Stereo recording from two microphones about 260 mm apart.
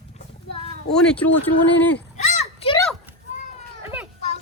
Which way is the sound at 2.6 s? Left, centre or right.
Centre.